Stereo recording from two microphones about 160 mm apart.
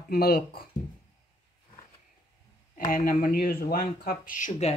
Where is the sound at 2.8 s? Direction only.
65° left (ahead or behind); by 4.7 s 50° left (ahead or behind).